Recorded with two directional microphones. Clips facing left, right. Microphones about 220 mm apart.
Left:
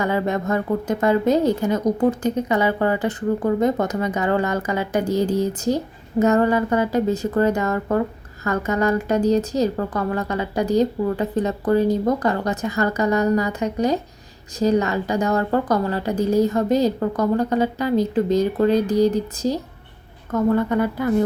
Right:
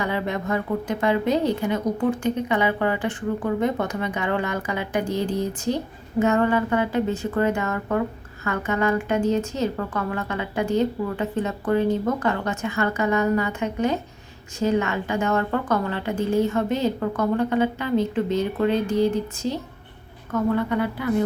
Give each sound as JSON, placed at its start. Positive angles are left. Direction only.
{"t": 0.0, "sound": "a woman's voice", "side_deg": 45}